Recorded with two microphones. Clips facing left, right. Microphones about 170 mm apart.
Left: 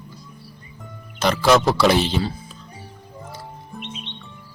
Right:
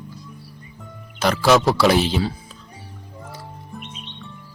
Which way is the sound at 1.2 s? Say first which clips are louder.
Even; centre (ahead or behind).